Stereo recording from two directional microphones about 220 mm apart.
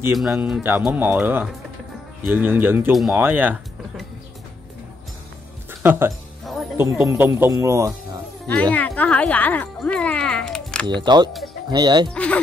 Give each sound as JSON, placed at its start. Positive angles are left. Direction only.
{"t": 0.1, "sound": "speech", "side_deg": 0}
{"t": 5.7, "sound": "music", "side_deg": -10}
{"t": 6.8, "sound": "speech", "side_deg": -10}
{"t": 8.7, "sound": "speech", "side_deg": 5}
{"t": 10.9, "sound": "speech", "side_deg": -20}
{"t": 12.1, "sound": "speech", "side_deg": 5}